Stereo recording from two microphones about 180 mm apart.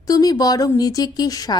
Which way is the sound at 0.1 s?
20° left (ahead or behind).